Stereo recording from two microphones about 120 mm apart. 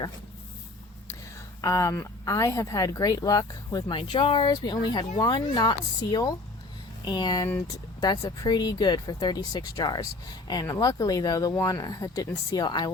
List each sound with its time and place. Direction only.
1.6 s speech: 30° left (ahead or behind)
7.4 s speech: 20° left (ahead or behind)
8.0 s speech: 35° left (ahead or behind)